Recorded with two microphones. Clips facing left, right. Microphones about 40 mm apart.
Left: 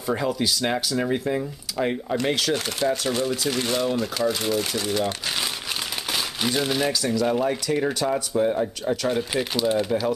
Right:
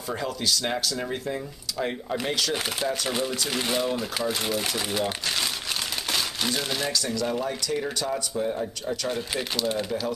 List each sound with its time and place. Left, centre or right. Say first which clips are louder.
0.1 s speech: left 4 dB; centre
2.5 s speech: left 4 dB; centre
6.1 s speech: left 3 dB; centre; by 8.9 s left
8.9 s speech: left 5 dB; centre